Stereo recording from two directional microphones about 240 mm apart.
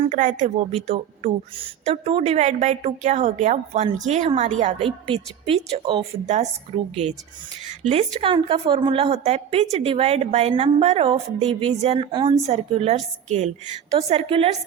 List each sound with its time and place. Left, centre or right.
0.0 s speech: right